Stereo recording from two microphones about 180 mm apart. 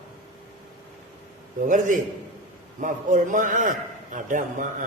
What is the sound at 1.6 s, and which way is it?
A man's voice, 45° right (ahead or behind).